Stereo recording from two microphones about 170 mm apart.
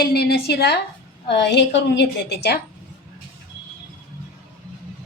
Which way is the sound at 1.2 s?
90° left.